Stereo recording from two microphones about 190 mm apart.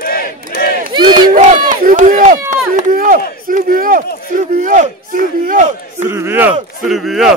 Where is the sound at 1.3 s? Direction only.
45° right (ahead or behind).